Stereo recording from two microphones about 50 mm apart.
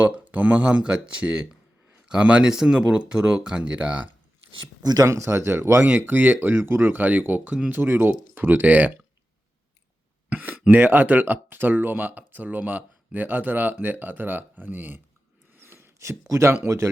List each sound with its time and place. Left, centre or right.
0.0 s speech: right
0.8 s speech: right
5.0 s speech: right
6.0 s speech: right
6.6 s speech: right
6.9 s speech: right
10.5 s speech: right
15.5 s a sound: right
16.3 s speech: right